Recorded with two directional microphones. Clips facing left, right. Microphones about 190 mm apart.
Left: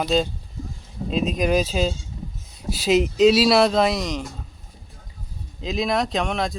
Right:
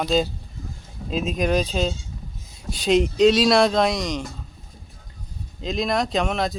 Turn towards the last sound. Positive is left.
turn(degrees=0)  # may be behind; listen again after turning